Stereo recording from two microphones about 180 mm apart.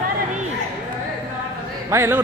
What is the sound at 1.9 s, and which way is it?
Speech, 15° right (ahead or behind).